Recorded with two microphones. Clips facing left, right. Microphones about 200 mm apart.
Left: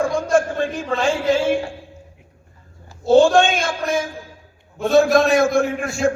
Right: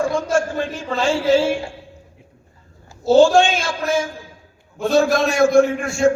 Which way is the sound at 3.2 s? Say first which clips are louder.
Right 1 dB; 55° left (ahead or behind).